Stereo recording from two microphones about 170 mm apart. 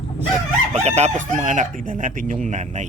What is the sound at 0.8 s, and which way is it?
Crowing, 40° right (ahead or behind).